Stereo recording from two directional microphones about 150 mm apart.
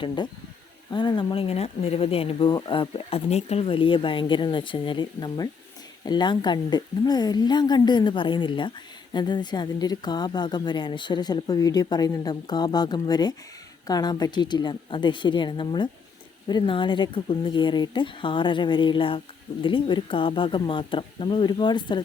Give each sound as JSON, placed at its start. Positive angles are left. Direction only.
{"t": 0.9, "sound": "a woman's voice", "side_deg": 30}